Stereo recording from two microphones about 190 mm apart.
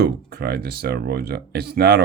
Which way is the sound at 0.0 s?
55° right (ahead or behind).